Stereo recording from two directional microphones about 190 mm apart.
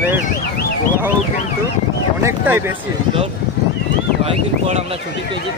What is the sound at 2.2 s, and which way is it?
Speech, 15° right (ahead or behind).